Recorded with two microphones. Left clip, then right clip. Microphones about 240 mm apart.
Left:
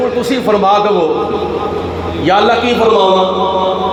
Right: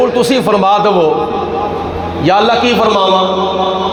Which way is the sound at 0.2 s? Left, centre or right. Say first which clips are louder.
Right 2 dB; right.